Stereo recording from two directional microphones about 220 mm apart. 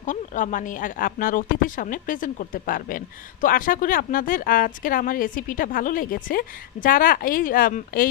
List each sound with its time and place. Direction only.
0.0 s speech: 35° left (ahead or behind)